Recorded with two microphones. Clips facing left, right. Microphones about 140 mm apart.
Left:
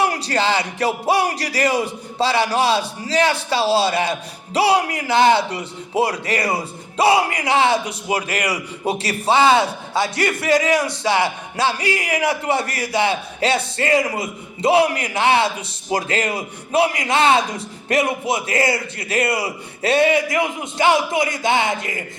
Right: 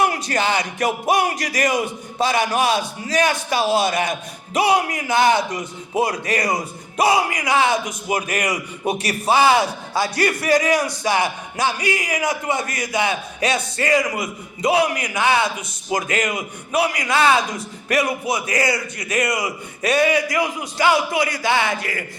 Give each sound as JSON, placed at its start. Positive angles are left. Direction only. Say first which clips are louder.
{"t": 0.0, "sound": "a man's voice", "louder": "left 1 dB", "side_deg": 35}